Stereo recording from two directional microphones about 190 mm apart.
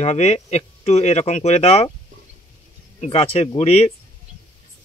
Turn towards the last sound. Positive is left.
turn(degrees=35)  # may be behind; listen again after turning